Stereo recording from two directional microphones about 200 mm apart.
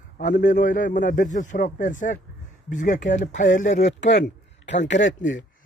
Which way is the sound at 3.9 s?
60° left (ahead or behind).